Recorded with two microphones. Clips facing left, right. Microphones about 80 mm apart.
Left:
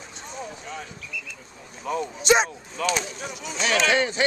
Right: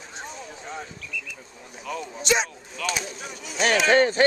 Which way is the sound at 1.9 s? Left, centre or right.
Left.